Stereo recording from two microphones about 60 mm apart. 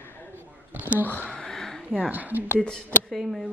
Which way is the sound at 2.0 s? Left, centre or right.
Right.